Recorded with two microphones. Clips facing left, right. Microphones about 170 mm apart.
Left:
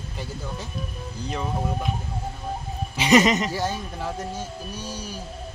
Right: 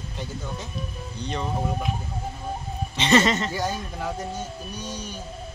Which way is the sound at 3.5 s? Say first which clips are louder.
Left 1 dB; 5° left (ahead or behind).